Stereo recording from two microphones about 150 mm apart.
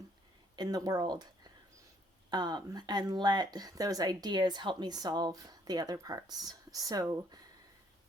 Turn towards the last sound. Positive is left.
turn(degrees=-25)  # may be behind; listen again after turning